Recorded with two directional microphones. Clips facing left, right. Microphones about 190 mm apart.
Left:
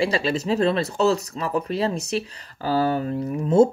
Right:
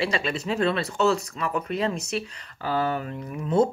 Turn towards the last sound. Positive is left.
turn(degrees=30)  # may be behind; listen again after turning